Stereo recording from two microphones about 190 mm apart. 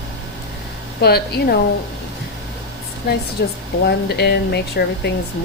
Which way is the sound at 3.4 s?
60° left (ahead or behind).